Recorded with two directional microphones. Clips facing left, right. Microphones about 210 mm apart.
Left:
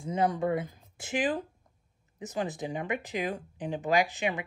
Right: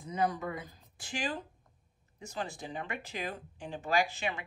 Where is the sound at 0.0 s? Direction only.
25° left (ahead or behind).